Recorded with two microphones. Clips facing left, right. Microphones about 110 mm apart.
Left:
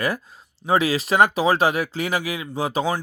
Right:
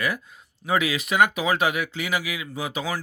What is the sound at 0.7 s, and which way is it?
Speech, 35° left (ahead or behind).